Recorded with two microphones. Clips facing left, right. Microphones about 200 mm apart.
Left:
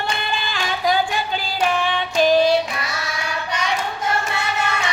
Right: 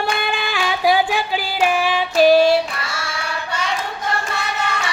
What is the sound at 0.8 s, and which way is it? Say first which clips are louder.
Music: right 3 dB; 5° right (ahead or behind).